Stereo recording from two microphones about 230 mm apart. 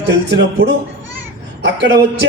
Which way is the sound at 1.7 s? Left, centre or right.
Right.